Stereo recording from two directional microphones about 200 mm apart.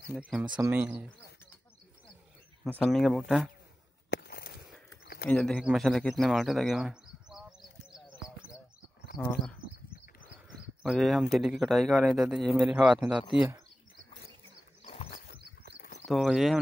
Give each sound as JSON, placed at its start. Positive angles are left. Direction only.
{"t": 0.2, "sound": "speech", "side_deg": -5}
{"t": 2.6, "sound": "speech", "side_deg": 0}
{"t": 4.1, "sound": "a sound", "side_deg": 50}
{"t": 5.3, "sound": "bird", "side_deg": 5}
{"t": 10.5, "sound": "a sound", "side_deg": 0}
{"t": 11.3, "sound": "speech", "side_deg": 0}
{"t": 13.2, "sound": "speech", "side_deg": 25}
{"t": 14.8, "sound": "horse", "side_deg": 30}
{"t": 15.8, "sound": "a sound", "side_deg": 35}
{"t": 16.1, "sound": "speech", "side_deg": 0}